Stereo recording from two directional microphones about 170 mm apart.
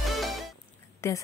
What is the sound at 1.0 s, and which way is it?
Speech, 15° left (ahead or behind).